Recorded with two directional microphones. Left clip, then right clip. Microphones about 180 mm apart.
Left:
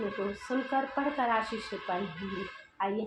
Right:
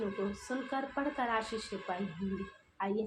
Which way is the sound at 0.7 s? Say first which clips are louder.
Left 5 dB; 40° right (ahead or behind).